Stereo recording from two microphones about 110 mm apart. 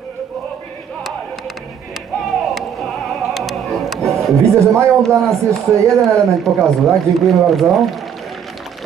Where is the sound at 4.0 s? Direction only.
25° right (ahead or behind).